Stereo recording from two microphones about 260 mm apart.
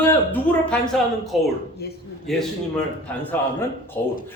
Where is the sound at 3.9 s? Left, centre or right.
Centre.